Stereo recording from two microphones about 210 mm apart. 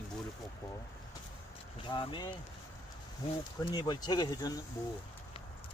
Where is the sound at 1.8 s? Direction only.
20° left (ahead or behind).